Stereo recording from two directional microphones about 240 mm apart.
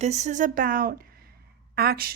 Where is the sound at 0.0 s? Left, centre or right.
Right.